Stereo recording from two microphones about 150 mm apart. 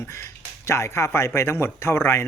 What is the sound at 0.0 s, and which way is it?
Speech, 20° left (ahead or behind).